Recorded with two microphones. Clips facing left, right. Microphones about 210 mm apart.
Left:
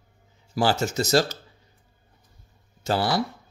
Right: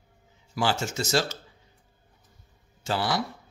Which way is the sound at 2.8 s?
40° left (ahead or behind).